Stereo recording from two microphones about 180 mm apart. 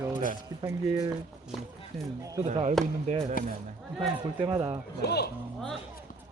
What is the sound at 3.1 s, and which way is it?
Speech, 35° right (ahead or behind).